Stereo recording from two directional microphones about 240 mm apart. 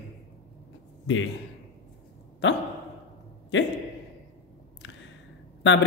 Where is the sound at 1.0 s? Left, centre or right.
Left.